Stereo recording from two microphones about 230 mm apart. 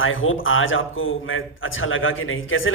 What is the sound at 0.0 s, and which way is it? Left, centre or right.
Speech, left.